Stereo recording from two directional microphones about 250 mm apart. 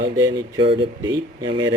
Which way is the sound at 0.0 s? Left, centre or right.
Centre.